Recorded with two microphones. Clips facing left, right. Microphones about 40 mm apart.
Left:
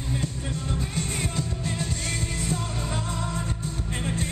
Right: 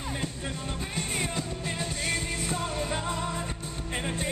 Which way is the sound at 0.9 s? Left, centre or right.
Centre.